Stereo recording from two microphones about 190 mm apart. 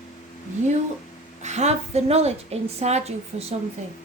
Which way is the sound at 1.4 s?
35° right (ahead or behind).